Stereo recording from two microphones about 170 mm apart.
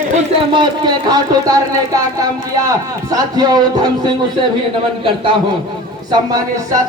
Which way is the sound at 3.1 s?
20° right (ahead or behind).